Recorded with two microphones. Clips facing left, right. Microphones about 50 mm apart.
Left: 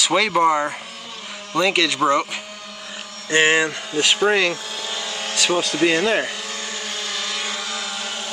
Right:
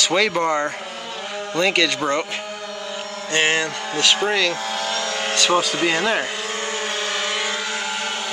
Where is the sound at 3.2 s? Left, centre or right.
Centre.